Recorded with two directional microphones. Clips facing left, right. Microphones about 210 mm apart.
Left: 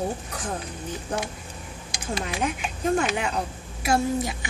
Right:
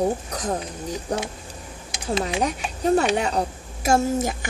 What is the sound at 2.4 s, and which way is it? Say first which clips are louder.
A woman's voice: right 3 dB; 35° right (ahead or behind).